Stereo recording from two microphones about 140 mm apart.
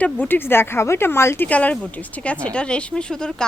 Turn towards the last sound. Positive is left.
turn(degrees=5)  # may be behind; listen again after turning